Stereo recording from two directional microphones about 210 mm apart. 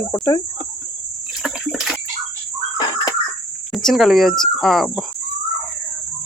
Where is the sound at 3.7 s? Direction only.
Centre (ahead or behind).